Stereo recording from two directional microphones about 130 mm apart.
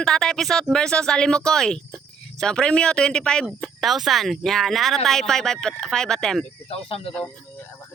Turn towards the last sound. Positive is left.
turn(degrees=45)  # may be behind; listen again after turning